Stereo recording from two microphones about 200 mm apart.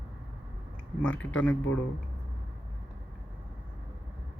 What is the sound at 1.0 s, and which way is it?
Speech, 5° left (ahead or behind).